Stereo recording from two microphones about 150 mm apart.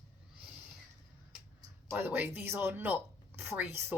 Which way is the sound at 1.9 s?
15° right (ahead or behind).